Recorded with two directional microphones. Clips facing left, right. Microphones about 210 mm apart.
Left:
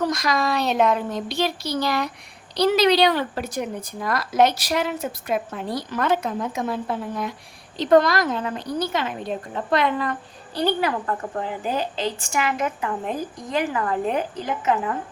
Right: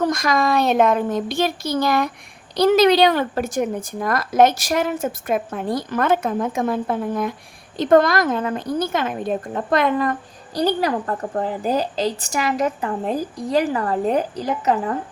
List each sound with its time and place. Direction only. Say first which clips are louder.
0.0 s a woman's voice: right 3 dB; 50° right (ahead or behind)